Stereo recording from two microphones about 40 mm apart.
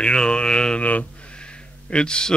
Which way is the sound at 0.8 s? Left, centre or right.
Left.